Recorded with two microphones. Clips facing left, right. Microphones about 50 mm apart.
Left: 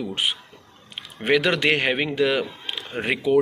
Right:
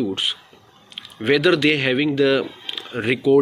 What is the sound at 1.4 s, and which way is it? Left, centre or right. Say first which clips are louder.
Speech: right 5 dB; left.